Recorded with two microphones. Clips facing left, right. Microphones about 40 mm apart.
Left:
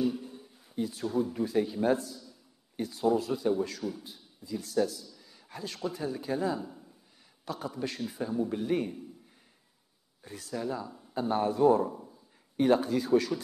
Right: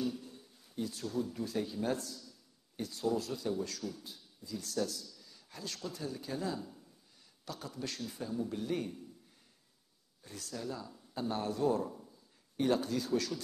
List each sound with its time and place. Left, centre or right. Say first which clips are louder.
0.0 s a man's voice: left 7 dB; centre
10.2 s speech: left 7 dB; centre
12.0 s a sound: left 6 dB; left